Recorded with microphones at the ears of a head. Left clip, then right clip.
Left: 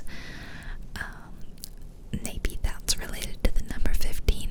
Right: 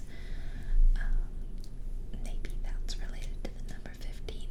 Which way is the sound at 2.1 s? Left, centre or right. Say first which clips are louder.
Left 12 dB; left.